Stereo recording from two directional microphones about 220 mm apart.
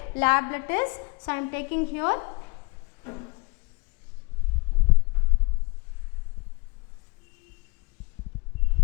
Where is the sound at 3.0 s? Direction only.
20° left (ahead or behind).